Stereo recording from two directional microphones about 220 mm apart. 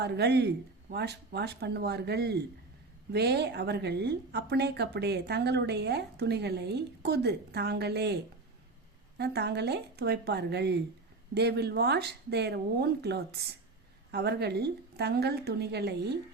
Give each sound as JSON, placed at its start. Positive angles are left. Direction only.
{"t": 0.0, "sound": "a woman's voice", "side_deg": -50}